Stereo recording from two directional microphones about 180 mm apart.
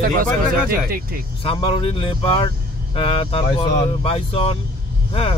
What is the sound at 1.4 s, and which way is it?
Speech, 30° left (ahead or behind).